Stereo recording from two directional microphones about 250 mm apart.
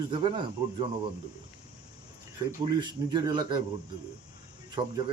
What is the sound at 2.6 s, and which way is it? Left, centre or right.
Speech, centre.